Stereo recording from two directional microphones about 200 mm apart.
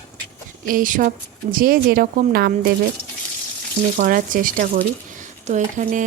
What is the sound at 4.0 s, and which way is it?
Speech, 45° right (ahead or behind).